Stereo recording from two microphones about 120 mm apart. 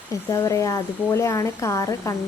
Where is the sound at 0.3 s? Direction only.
25° left (ahead or behind).